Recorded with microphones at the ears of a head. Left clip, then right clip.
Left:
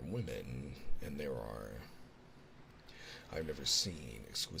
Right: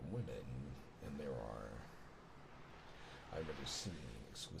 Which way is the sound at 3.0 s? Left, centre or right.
Left.